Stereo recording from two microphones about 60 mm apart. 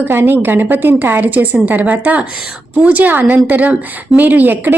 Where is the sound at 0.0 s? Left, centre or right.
Right.